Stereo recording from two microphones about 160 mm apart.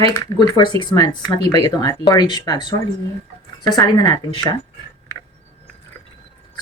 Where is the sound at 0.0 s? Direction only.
25° left (ahead or behind).